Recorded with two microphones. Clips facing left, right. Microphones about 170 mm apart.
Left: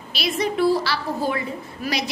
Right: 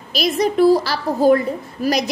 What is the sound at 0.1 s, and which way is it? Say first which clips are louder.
A woman's voice: right 6 dB; 40° right (ahead or behind).